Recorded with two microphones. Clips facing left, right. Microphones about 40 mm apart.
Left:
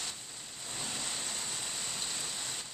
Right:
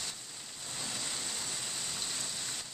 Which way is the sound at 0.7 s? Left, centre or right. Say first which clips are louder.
Left 1 dB; centre.